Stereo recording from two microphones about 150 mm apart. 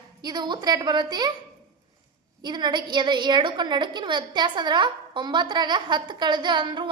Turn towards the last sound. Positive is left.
turn(degrees=-30)  # may be behind; listen again after turning